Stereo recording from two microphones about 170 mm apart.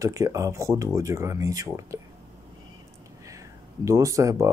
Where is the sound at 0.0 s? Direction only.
20° right (ahead or behind).